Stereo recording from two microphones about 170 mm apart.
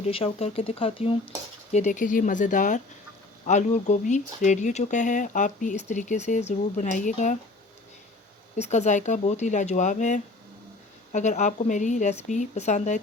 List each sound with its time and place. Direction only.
0.0 s speech: 35° left (ahead or behind)
1.7 s speech: 45° left (ahead or behind)
8.5 s speech: 40° left (ahead or behind)